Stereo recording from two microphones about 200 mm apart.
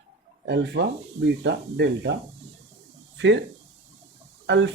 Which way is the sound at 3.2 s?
65° right (ahead or behind).